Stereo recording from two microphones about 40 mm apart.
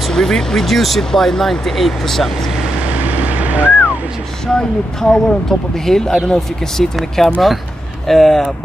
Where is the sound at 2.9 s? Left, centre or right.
Right.